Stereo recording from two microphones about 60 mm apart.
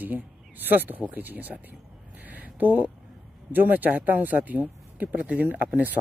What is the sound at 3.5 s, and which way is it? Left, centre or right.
Speech, right.